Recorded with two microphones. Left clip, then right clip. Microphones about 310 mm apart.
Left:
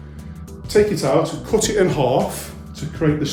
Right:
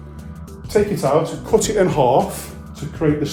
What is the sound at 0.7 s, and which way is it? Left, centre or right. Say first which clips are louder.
Speech: even; centre.